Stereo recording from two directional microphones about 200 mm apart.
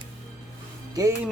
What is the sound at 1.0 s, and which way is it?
Speech, 15° right (ahead or behind).